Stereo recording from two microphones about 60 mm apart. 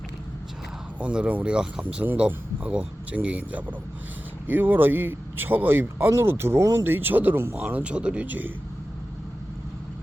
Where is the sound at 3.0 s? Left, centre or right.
Right.